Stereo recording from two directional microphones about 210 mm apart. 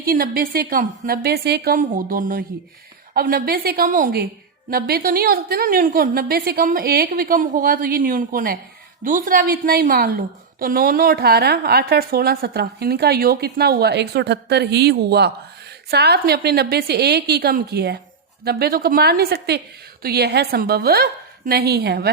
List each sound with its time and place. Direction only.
0.0 s a woman's voice: 45° right (ahead or behind)